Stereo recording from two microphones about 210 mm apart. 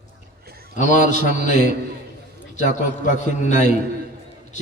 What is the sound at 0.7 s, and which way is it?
Speech, 35° left (ahead or behind).